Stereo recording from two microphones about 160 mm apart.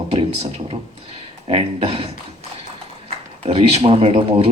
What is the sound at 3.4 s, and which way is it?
Speech, 40° right (ahead or behind).